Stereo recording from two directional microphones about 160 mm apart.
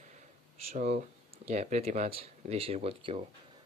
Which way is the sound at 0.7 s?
45° right (ahead or behind).